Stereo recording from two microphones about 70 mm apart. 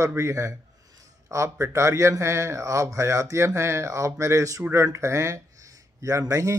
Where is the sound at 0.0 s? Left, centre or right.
Right.